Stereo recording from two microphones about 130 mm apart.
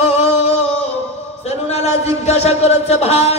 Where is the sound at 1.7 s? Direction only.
55° left (ahead or behind).